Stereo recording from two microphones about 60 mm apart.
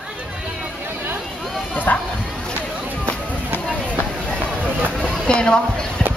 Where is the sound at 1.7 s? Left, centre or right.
Left.